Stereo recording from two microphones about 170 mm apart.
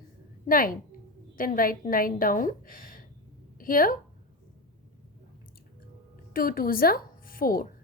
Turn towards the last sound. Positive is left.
turn(degrees=60)  # may be behind; listen again after turning